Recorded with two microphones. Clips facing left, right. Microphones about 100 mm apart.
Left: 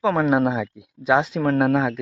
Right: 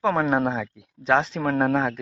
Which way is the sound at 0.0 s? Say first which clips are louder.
Left 3 dB; centre (ahead or behind).